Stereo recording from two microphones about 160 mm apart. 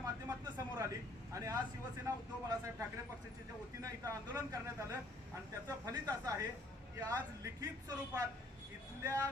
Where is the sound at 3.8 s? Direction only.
20° right (ahead or behind).